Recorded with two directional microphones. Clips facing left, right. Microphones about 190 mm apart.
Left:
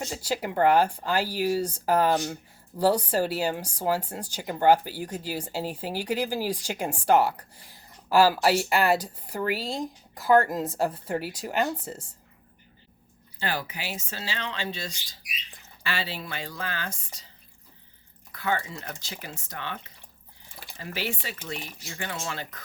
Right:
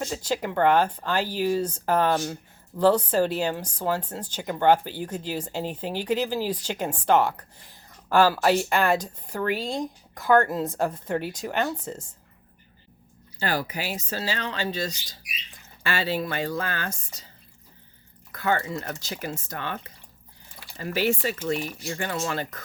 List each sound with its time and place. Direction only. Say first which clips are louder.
0.0 s speech: right 2 dB; 10° left (ahead or behind)
13.4 s speech: right 4 dB; 40° right (ahead or behind)
18.3 s speech: right 4 dB; 45° right (ahead or behind)